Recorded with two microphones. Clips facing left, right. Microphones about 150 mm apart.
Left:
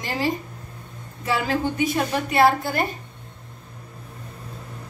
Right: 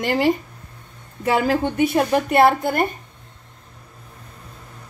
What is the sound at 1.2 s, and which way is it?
A woman's voice, 55° right (ahead or behind).